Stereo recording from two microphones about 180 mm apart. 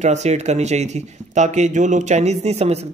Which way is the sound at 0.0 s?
40° right (ahead or behind).